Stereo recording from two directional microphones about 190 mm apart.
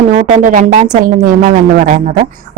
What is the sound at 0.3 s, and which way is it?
Speech, 40° right (ahead or behind).